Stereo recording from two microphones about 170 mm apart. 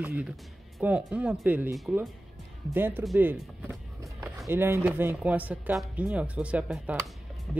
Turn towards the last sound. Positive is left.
turn(degrees=0)  # may be behind; listen again after turning